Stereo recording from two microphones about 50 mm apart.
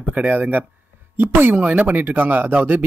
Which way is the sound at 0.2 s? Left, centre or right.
Right.